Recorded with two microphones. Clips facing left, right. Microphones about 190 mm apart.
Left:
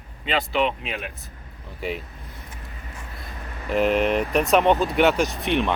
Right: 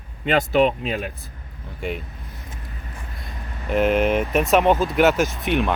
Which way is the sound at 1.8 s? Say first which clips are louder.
Right 1 dB; centre (ahead or behind).